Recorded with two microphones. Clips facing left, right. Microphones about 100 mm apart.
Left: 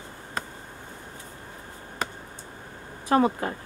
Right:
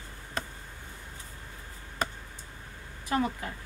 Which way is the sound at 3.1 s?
50° left (ahead or behind).